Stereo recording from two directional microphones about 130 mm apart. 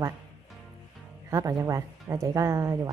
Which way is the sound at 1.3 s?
25° right (ahead or behind).